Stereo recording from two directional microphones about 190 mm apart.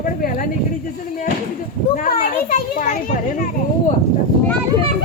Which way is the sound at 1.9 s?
45° left (ahead or behind).